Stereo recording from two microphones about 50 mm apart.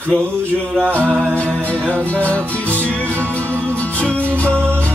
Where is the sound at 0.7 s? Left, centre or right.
Right.